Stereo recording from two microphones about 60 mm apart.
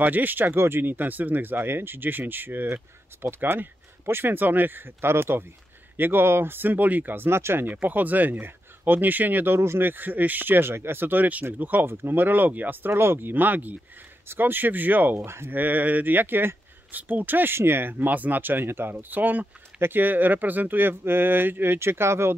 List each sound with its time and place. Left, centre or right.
0.0 s speech: right
7.6 s speech: right
13.3 s speech: right
15.1 s speech: right
15.5 s speech: right